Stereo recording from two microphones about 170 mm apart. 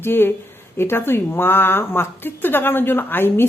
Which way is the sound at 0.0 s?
10° left (ahead or behind).